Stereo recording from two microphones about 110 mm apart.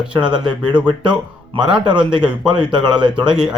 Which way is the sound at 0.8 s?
10° right (ahead or behind).